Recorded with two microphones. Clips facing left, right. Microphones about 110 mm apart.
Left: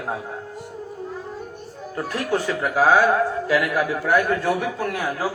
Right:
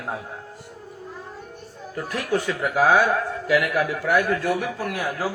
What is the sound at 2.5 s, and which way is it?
A man's voice, 20° left (ahead or behind).